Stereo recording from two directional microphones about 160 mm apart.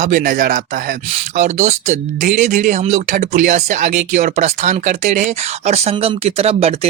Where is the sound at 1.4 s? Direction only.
45° right (ahead or behind).